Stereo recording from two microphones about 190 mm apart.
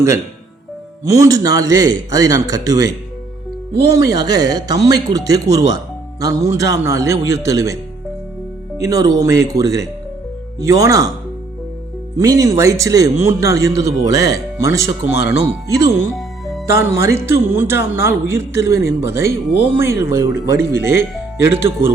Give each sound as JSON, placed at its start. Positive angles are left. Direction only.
{"t": 1.0, "sound": "speech", "side_deg": -15}
{"t": 3.9, "sound": "speech", "side_deg": -20}
{"t": 8.8, "sound": "speech", "side_deg": -15}
{"t": 12.1, "sound": "speech", "side_deg": -15}
{"t": 16.1, "sound": "music", "side_deg": 0}
{"t": 16.6, "sound": "speech", "side_deg": -15}